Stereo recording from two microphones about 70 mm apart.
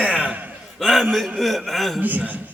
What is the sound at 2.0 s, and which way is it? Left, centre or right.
Speech, right.